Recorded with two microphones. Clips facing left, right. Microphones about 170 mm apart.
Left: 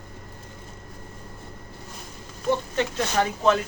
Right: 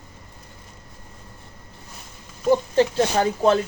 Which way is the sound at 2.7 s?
30° right (ahead or behind).